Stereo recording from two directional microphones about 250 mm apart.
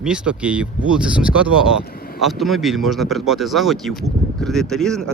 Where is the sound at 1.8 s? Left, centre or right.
Left.